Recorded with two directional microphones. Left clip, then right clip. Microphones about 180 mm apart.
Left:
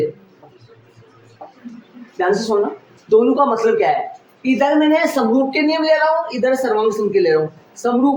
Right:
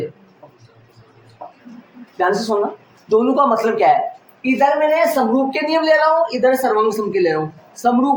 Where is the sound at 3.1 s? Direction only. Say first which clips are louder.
Left 1 dB; 15° right (ahead or behind).